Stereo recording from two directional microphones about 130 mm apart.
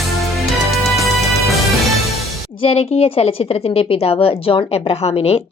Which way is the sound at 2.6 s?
50° left (ahead or behind).